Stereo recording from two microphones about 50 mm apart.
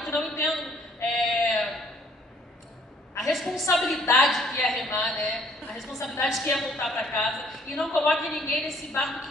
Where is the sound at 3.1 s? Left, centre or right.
Centre.